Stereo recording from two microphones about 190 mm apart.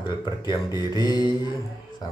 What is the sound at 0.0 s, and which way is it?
Speech, 25° left (ahead or behind).